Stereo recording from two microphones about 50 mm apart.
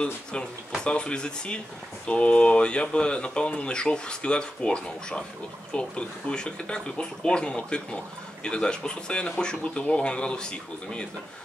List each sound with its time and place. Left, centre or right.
0.0 s speech: centre